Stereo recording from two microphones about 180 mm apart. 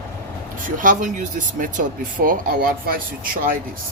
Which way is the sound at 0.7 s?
45° right (ahead or behind).